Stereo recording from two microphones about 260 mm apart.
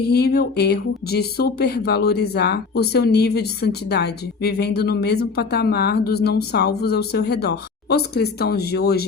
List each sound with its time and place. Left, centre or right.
0.1 s speech: left